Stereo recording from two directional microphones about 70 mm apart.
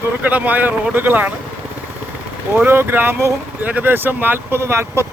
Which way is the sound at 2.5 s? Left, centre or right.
Right.